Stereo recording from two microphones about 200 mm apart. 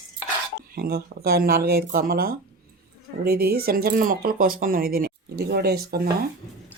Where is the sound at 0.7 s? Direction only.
50° right (ahead or behind).